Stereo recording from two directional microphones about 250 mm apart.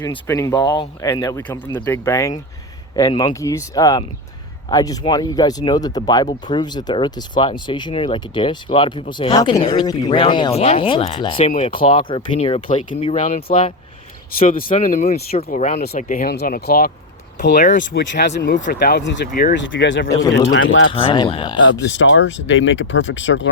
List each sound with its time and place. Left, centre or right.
0.0 s speech: centre
14.3 s speech: left
18.0 s speech: left
20.9 s speech: left
21.6 s speech: left